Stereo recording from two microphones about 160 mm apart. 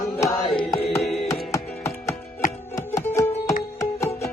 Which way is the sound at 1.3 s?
20° left (ahead or behind).